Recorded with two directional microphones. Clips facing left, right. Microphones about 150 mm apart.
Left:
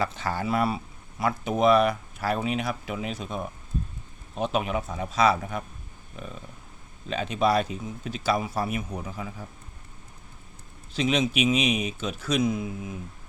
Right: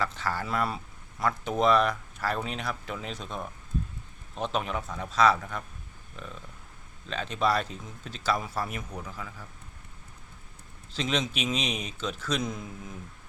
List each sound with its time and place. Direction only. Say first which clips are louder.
0.0 s speech: left 3 dB; 15° left (ahead or behind)
10.9 s speech: left 6 dB; 10° left (ahead or behind)